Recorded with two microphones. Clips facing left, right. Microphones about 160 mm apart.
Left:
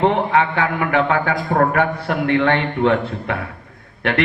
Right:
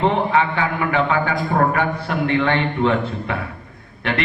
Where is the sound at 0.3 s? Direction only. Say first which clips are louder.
Left 1 dB; 60° left (ahead or behind).